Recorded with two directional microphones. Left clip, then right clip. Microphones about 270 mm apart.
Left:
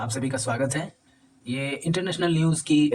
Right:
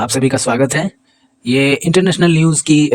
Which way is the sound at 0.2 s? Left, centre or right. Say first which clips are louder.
Right 11 dB; right.